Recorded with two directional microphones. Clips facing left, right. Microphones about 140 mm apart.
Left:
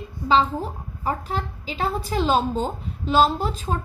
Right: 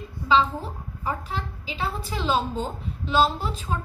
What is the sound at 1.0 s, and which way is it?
A woman's voice, 40° left (ahead or behind).